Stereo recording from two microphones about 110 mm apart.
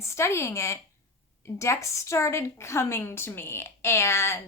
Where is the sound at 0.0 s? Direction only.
25° left (ahead or behind).